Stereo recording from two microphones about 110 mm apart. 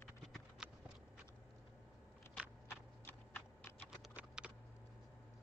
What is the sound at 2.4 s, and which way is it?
Biting, 5° right (ahead or behind).